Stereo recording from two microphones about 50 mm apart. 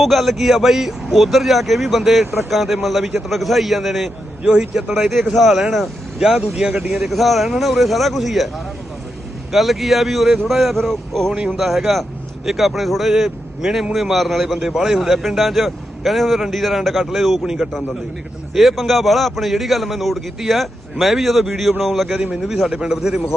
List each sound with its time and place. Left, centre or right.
0.0 s a man's voice: centre
5.3 s a man's voice: centre
17.4 s a man's voice: centre
18.5 s a man's voice: centre
22.1 s a man's voice: centre
22.4 s a man's voice: centre